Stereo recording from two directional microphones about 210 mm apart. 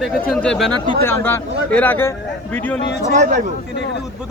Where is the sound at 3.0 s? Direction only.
35° right (ahead or behind).